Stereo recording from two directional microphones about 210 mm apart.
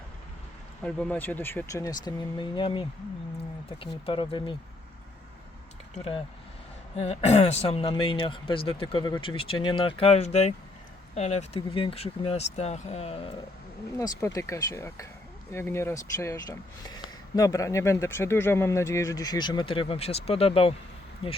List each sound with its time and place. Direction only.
0.9 s speech: 5° left (ahead or behind); by 4.5 s 20° left (ahead or behind)
5.9 s speech: 25° left (ahead or behind)
14.0 s speech: 15° left (ahead or behind)